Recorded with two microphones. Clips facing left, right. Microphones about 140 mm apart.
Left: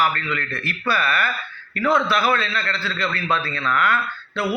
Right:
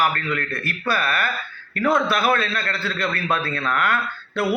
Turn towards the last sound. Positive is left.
turn(degrees=-50)  # may be behind; listen again after turning